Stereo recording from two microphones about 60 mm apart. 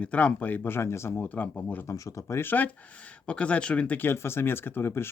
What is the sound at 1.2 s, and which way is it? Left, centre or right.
Speech, left.